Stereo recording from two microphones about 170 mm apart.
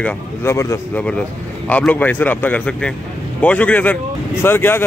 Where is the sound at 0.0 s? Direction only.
15° left (ahead or behind).